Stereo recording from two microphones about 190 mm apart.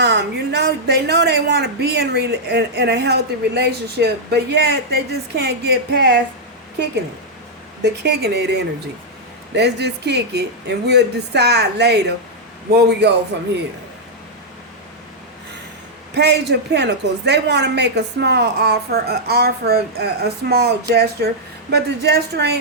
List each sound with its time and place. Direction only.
0.0 s a woman's voice: 60° right (ahead or behind)
8.0 s a woman's voice: 60° right (ahead or behind)
16.1 s a woman's voice: 60° right (ahead or behind)